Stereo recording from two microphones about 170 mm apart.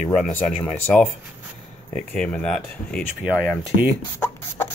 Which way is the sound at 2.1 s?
5° left (ahead or behind).